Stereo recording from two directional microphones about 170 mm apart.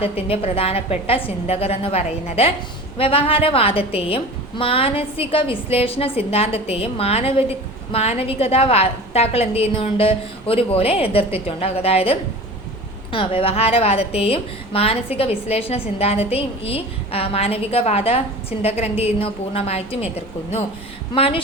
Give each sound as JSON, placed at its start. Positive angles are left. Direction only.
{"t": 0.0, "sound": "a woman's voice", "side_deg": 35}
{"t": 21.2, "sound": "a woman's voice", "side_deg": 35}